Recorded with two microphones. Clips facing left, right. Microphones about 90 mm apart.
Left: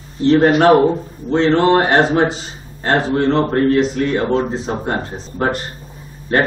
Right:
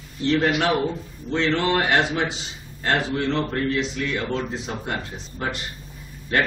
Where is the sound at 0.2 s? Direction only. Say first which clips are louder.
Left 9 dB; 35° left (ahead or behind).